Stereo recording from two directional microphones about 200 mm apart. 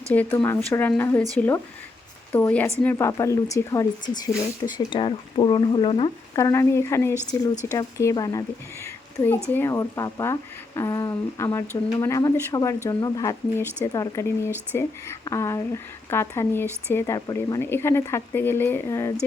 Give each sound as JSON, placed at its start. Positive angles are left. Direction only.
{"t": 0.1, "sound": "speech", "side_deg": 10}